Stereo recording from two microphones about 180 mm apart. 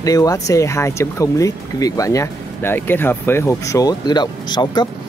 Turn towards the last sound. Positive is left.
turn(degrees=25)  # may be behind; listen again after turning